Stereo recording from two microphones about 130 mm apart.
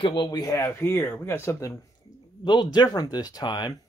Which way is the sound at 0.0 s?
35° left (ahead or behind).